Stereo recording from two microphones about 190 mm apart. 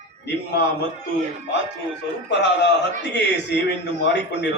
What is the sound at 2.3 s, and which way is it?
A man's voice, 65° left (ahead or behind).